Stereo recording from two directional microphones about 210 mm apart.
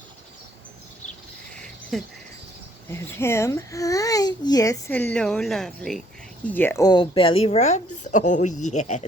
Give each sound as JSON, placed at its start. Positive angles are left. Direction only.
{"t": 1.5, "sound": "a sound", "side_deg": 0}
{"t": 2.9, "sound": "speech", "side_deg": 10}
{"t": 5.1, "sound": "speech", "side_deg": 0}